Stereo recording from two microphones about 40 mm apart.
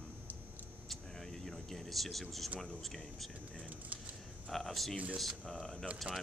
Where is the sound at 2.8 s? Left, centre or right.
Centre.